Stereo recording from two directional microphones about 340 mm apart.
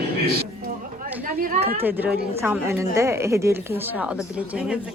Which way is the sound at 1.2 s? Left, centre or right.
Right.